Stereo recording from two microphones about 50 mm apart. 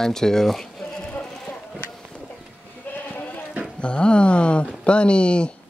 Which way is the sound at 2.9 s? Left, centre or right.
Left.